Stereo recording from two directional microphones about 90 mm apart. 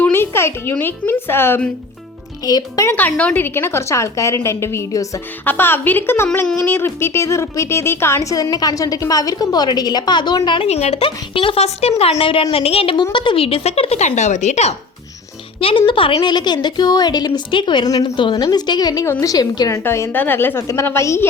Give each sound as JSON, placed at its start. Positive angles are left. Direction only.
{"t": 0.0, "sound": "speech", "side_deg": 25}
{"t": 2.4, "sound": "a woman's voice", "side_deg": 45}
{"t": 2.9, "sound": "a woman's voice", "side_deg": 15}
{"t": 5.5, "sound": "a woman's voice", "side_deg": 25}
{"t": 10.6, "sound": "speech", "side_deg": 80}
{"t": 15.9, "sound": "a woman's voice", "side_deg": 70}
{"t": 17.8, "sound": "a woman's voice", "side_deg": 45}
{"t": 18.2, "sound": "a woman's voice", "side_deg": 60}
{"t": 19.8, "sound": "a woman's voice", "side_deg": 25}